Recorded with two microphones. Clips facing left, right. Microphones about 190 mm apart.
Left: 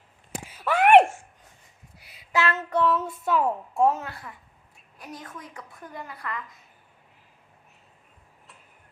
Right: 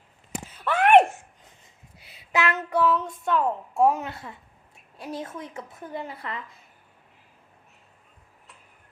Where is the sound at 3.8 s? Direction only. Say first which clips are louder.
Right 2 dB; 15° right (ahead or behind).